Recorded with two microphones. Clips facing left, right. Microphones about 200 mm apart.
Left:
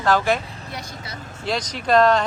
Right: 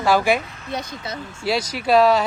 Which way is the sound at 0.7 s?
20° right (ahead or behind).